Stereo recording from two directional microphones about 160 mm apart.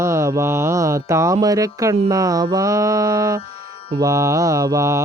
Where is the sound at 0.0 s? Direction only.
20° right (ahead or behind).